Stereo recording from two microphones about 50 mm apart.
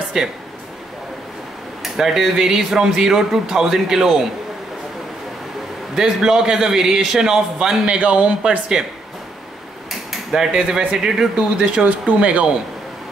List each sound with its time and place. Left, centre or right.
1.8 s a man's voice: centre
5.9 s a man's voice: centre
9.8 s a sound: centre
11.3 s speech: right